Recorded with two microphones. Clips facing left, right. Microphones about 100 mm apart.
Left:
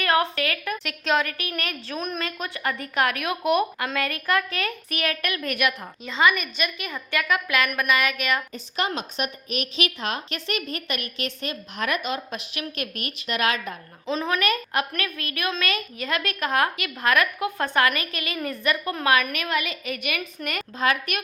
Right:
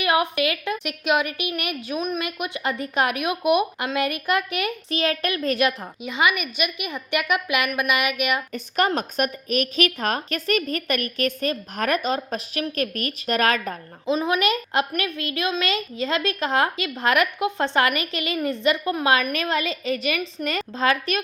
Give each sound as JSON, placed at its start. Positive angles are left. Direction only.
{"t": 0.0, "sound": "a woman's voice", "side_deg": -15}
{"t": 2.0, "sound": "a woman's voice", "side_deg": -5}
{"t": 2.2, "sound": "a woman's voice", "side_deg": -15}
{"t": 6.0, "sound": "a woman's voice", "side_deg": -15}
{"t": 8.5, "sound": "a woman's voice", "side_deg": -50}
{"t": 14.1, "sound": "a woman's voice", "side_deg": -15}
{"t": 14.4, "sound": "a woman's voice", "side_deg": -25}
{"t": 19.2, "sound": "a woman's voice", "side_deg": -35}